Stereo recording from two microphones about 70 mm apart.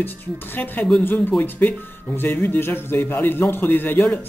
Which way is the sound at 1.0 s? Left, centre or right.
Left.